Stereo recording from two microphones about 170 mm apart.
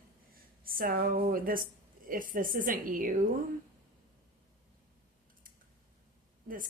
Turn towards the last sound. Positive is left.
turn(degrees=-55)  # may be behind; listen again after turning